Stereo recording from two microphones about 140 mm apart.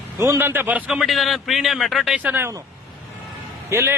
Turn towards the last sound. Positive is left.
turn(degrees=-20)  # may be behind; listen again after turning